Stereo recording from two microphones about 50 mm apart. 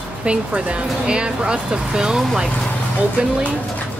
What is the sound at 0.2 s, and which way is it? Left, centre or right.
Speech, right.